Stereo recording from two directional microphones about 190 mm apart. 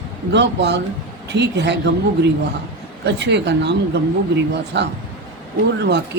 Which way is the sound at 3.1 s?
65° right (ahead or behind).